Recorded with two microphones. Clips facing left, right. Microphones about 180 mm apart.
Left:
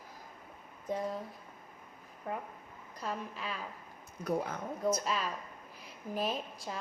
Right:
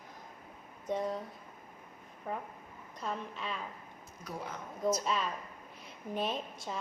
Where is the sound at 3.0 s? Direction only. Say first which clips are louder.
Even; 5° left (ahead or behind).